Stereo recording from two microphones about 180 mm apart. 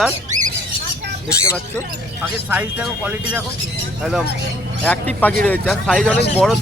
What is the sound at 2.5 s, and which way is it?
Speech, 10° right (ahead or behind).